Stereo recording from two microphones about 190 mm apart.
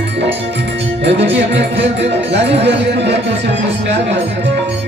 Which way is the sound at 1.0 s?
65° right (ahead or behind).